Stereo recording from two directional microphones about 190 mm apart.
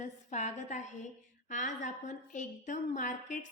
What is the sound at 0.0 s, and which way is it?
A woman's voice, 40° left (ahead or behind).